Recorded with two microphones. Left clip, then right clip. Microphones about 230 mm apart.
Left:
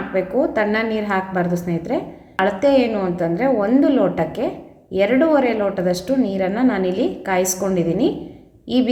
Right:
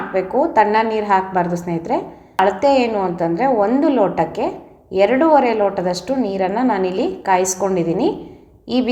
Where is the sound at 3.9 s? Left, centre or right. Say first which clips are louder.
Right 2 dB; right.